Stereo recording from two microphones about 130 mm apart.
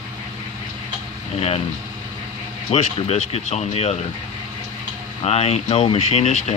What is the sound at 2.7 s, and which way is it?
Speech, 50° left (ahead or behind).